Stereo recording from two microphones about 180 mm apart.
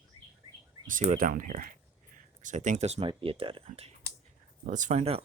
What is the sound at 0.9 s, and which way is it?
Speech, 45° right (ahead or behind).